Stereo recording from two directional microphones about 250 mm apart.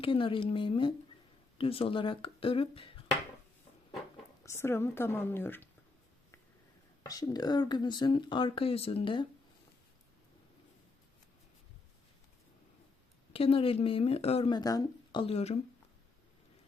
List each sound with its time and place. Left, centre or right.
0.0 s speech: left
4.4 s speech: centre
7.0 s speech: centre
13.3 s speech: left